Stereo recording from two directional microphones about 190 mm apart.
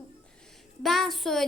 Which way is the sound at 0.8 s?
Centre (ahead or behind).